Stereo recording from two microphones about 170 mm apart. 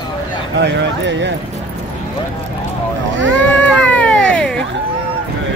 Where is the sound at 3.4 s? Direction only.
5° left (ahead or behind).